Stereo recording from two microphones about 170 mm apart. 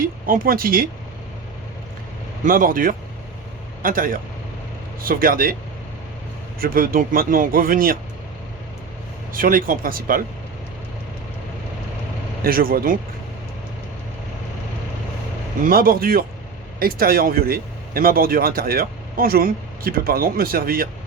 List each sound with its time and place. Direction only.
0.0 s speech: 55° right (ahead or behind)
2.4 s speech: 55° right (ahead or behind)
6.6 s speech: 55° right (ahead or behind)
9.3 s speech: 55° right (ahead or behind)
12.4 s speech: 60° right (ahead or behind)
15.6 s speech: 60° right (ahead or behind)